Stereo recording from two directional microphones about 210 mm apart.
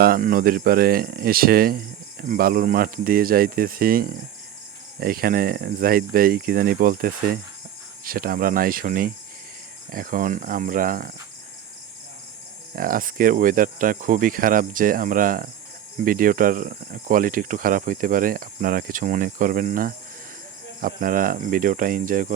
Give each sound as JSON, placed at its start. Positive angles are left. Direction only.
{"t": 0.0, "sound": "speech", "side_deg": -45}
{"t": 12.7, "sound": "speech", "side_deg": -40}